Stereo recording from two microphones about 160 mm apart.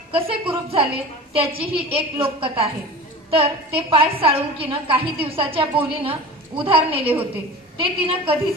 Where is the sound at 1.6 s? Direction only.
35° right (ahead or behind).